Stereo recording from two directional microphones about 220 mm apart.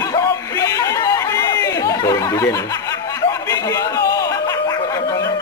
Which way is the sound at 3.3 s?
15° left (ahead or behind).